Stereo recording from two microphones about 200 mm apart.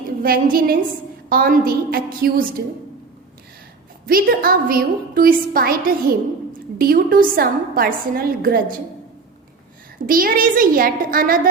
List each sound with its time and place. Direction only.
0.2 s a woman's voice: 45° right (ahead or behind)
4.0 s a woman's voice: 45° right (ahead or behind)
10.1 s a woman's voice: 45° right (ahead or behind)